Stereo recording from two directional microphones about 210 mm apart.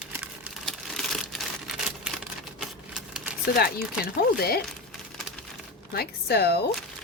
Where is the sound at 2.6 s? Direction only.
Centre (ahead or behind).